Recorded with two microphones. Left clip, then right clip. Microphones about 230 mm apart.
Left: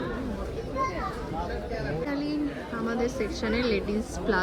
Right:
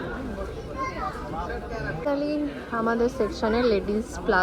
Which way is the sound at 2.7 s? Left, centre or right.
Centre.